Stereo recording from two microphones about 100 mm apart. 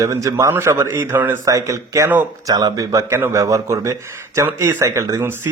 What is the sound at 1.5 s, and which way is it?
Speech, 35° right (ahead or behind).